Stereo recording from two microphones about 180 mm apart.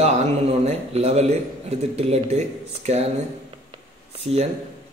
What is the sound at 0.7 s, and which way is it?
Speech, 35° right (ahead or behind).